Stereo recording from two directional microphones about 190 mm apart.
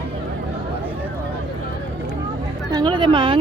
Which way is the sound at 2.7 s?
25° right (ahead or behind).